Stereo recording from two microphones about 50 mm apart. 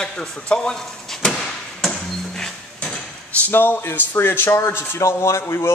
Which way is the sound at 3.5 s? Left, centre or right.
Left.